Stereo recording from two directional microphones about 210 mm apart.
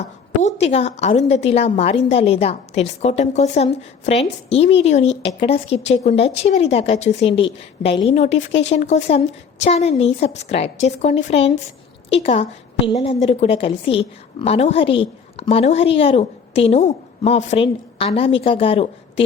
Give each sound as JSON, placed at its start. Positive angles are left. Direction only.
{"t": 0.4, "sound": "a woman's voice", "side_deg": 30}